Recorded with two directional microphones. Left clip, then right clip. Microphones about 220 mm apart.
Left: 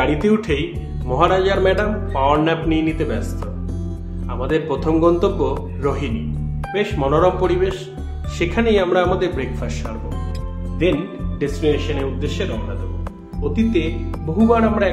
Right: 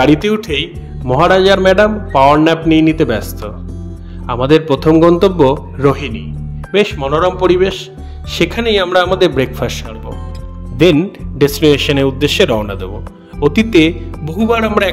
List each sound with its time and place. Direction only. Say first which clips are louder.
0.0 s speech: right 6 dB; 35° right (ahead or behind)
4.3 s speech: right 10 dB; 35° right (ahead or behind)
11.3 s speech: right 9 dB; 40° right (ahead or behind)